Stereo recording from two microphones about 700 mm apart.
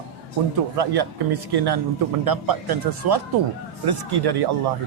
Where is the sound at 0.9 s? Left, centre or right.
Right.